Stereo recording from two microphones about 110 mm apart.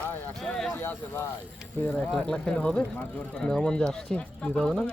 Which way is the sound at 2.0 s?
5° left (ahead or behind).